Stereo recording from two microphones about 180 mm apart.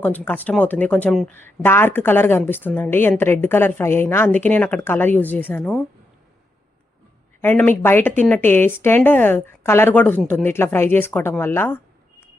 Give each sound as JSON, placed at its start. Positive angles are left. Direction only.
{"t": 0.0, "sound": "speech", "side_deg": 10}
{"t": 7.4, "sound": "speech", "side_deg": 10}